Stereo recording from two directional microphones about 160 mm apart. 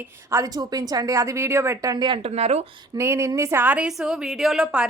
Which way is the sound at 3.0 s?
20° right (ahead or behind).